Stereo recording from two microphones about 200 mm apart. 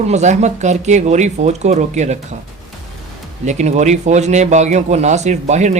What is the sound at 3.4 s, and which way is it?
Speech, 35° right (ahead or behind).